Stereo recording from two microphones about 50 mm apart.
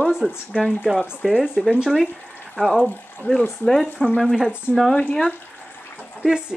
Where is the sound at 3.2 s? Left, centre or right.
Left.